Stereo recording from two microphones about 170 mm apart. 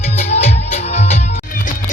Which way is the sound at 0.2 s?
40° left (ahead or behind).